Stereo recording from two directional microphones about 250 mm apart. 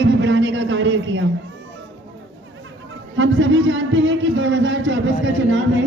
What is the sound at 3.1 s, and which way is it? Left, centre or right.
A man's voice, right.